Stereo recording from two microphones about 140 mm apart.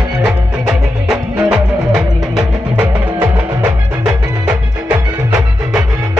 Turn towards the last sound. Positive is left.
turn(degrees=-5)  # may be behind; listen again after turning